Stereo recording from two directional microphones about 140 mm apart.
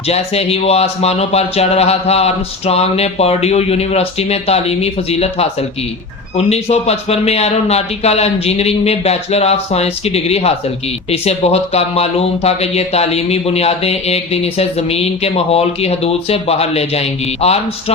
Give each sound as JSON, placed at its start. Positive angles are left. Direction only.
{"t": 0.1, "sound": "speech", "side_deg": 45}